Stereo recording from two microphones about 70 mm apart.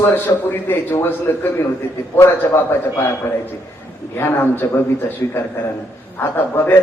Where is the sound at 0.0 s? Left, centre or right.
Left.